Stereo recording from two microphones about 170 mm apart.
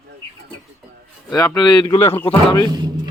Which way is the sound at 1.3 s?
20° left (ahead or behind).